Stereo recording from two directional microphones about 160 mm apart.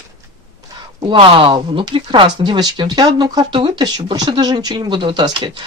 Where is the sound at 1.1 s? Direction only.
30° right (ahead or behind).